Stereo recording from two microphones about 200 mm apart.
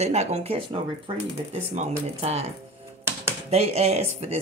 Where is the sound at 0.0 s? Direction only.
35° right (ahead or behind).